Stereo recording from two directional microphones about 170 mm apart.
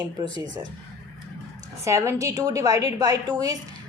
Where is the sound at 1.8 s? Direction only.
15° right (ahead or behind).